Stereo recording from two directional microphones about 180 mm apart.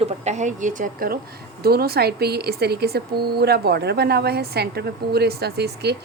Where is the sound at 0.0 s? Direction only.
40° right (ahead or behind).